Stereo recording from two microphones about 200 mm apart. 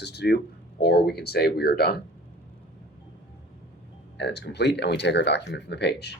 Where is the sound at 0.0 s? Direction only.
55° left (ahead or behind).